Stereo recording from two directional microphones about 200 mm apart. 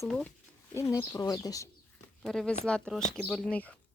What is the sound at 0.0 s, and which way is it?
Speech, 5° left (ahead or behind).